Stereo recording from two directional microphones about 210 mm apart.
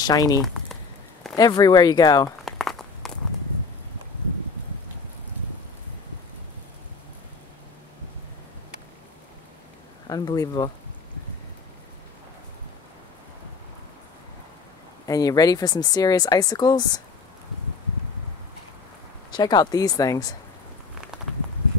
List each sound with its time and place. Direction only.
0.0 s speech: 20° left (ahead or behind)
2.4 s a sound: centre (ahead or behind)
10.0 s speech: 20° left (ahead or behind)
15.0 s speech: 15° left (ahead or behind)
19.3 s speech: 20° left (ahead or behind)